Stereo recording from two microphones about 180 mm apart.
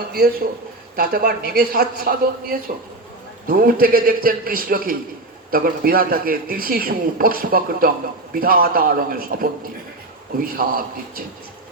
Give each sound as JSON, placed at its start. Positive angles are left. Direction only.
{"t": 0.1, "sound": "a man's voice", "side_deg": -55}